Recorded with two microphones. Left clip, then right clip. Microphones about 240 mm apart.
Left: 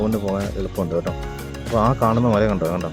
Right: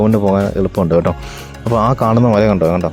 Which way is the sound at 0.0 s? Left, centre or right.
Right.